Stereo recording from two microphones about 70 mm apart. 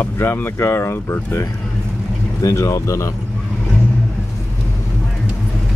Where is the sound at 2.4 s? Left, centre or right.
Left.